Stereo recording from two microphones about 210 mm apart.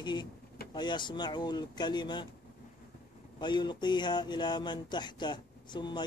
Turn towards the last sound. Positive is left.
turn(degrees=20)  # may be behind; listen again after turning